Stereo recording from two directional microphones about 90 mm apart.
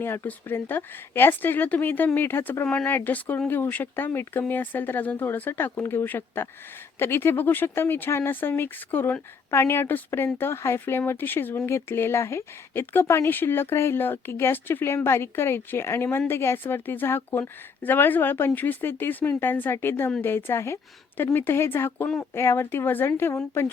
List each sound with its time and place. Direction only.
0.3 s speech: 20° left (ahead or behind)